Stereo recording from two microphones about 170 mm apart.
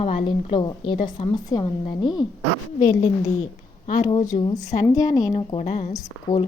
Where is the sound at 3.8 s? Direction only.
45° left (ahead or behind).